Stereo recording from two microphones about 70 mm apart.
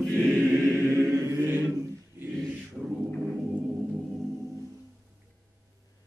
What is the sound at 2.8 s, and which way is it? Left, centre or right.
A capella, centre.